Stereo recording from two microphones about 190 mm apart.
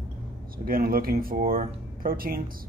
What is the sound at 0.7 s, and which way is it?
Speech, 50° right (ahead or behind).